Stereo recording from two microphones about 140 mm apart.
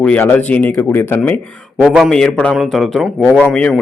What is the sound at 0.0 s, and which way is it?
A man's voice, 10° left (ahead or behind).